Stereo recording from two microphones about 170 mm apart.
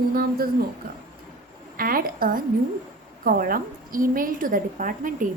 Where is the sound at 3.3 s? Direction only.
55° right (ahead or behind).